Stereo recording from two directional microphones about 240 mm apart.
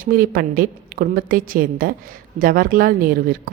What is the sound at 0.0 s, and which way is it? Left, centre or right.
A woman's voice, right.